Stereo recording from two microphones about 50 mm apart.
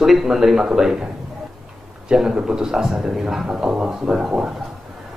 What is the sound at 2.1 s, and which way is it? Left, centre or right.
A woman's voice, centre.